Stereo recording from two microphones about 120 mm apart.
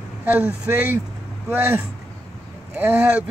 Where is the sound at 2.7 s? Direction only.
15° right (ahead or behind).